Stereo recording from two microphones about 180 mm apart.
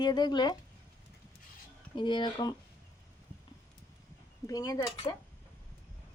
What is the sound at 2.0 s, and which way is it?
Speech, 25° left (ahead or behind).